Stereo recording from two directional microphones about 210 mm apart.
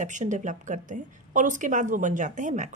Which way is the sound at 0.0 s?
35° right (ahead or behind).